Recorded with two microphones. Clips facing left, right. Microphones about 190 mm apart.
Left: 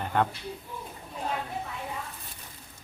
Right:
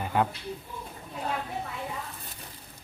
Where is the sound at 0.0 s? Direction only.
5° right (ahead or behind).